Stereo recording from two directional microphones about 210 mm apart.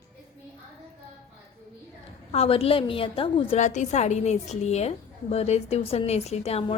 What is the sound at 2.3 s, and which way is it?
A woman's voice, 25° left (ahead or behind).